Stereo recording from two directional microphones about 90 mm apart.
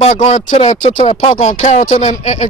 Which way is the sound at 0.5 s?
90° left.